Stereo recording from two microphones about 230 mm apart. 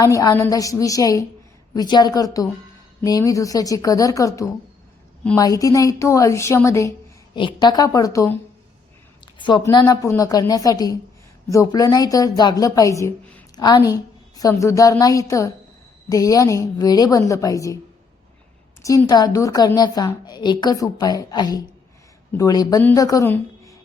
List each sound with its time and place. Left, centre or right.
0.0 s a woman's voice: centre
18.8 s a woman's voice: centre